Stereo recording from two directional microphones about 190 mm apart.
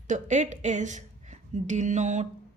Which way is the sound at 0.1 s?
40° right (ahead or behind).